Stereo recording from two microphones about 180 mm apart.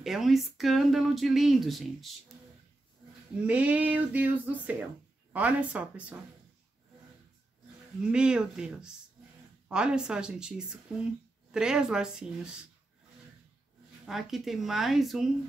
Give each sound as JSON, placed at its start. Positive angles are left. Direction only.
{"t": 0.0, "sound": "speech", "side_deg": 0}
{"t": 3.4, "sound": "a sound", "side_deg": -10}
{"t": 8.1, "sound": "speech", "side_deg": -5}
{"t": 14.0, "sound": "speech", "side_deg": 0}